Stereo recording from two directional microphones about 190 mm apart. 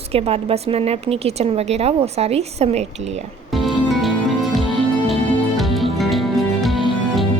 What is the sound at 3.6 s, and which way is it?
Music, centre (ahead or behind).